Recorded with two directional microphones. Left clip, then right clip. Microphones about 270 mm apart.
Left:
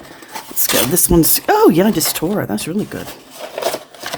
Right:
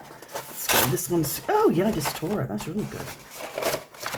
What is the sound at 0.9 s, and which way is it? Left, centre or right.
Speech, left.